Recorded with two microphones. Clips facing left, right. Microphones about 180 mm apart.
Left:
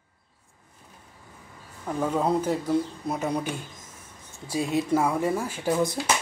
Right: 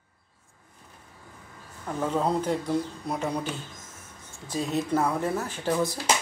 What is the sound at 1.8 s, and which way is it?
Speech, 10° left (ahead or behind).